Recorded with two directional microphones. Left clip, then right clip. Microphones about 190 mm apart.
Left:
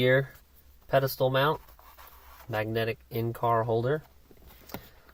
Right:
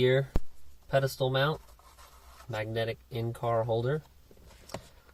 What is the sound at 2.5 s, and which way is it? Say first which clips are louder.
Speech: left 3 dB; 45° left (ahead or behind).